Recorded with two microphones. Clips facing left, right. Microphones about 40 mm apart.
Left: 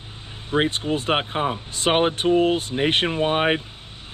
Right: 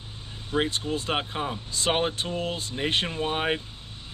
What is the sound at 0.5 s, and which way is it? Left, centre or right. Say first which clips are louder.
Speech: left 5 dB; left.